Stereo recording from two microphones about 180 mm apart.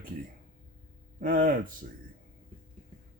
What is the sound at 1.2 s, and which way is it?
Speech, 50° right (ahead or behind).